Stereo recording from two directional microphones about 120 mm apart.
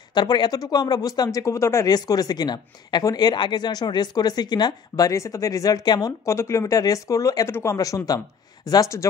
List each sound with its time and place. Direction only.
0.1 s speech: 35° left (ahead or behind)